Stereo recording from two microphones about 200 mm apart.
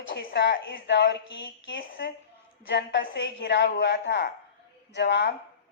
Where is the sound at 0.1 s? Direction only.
60° left (ahead or behind).